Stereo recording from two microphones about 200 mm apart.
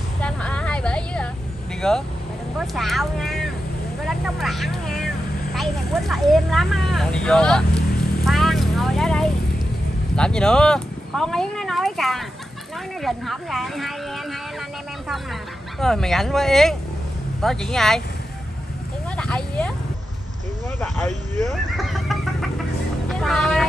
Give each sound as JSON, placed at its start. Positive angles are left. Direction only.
{"t": 0.2, "sound": "vehicle", "side_deg": 5}
{"t": 1.8, "sound": "speech", "side_deg": 5}
{"t": 8.3, "sound": "vehicle", "side_deg": 0}
{"t": 10.1, "sound": "speech", "side_deg": 5}
{"t": 15.8, "sound": "speech", "side_deg": 0}
{"t": 19.1, "sound": "a sound", "side_deg": 5}
{"t": 21.0, "sound": "speech", "side_deg": -35}
{"t": 21.7, "sound": "neigh", "side_deg": 0}
{"t": 23.0, "sound": "speech", "side_deg": 0}